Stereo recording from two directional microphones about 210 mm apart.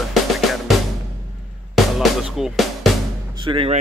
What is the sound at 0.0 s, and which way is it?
Drum, centre (ahead or behind).